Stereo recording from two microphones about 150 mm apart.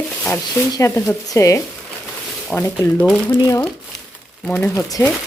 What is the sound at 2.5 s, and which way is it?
Speech, 10° left (ahead or behind).